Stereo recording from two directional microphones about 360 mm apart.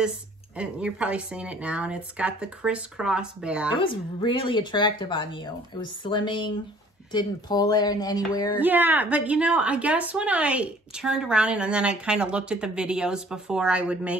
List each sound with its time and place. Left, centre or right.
0.6 s speech: centre
3.7 s speech: centre
8.5 s speech: centre